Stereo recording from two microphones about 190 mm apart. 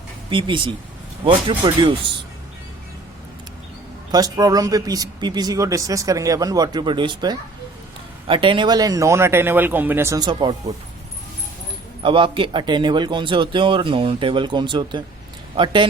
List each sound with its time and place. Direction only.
0.3 s speech: 25° right (ahead or behind)
4.1 s speech: 20° right (ahead or behind)
12.0 s speech: 25° right (ahead or behind)